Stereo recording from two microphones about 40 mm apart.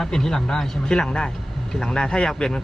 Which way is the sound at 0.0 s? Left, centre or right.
Centre.